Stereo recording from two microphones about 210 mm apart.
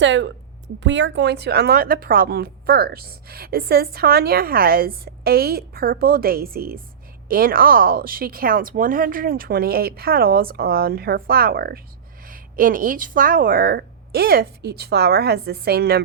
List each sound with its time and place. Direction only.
0.0 s a woman's voice: 60° right (ahead or behind)